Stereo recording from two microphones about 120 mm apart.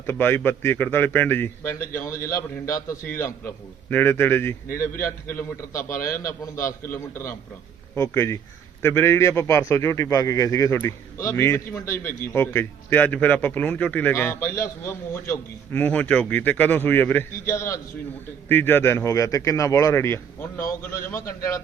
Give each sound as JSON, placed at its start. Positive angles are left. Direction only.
{"t": 0.0, "sound": "a man's voice", "side_deg": 20}